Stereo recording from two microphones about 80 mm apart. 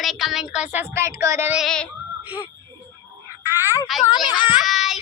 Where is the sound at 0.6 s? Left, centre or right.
Right.